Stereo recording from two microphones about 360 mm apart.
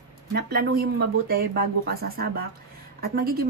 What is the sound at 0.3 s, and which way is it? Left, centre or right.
Speech, right.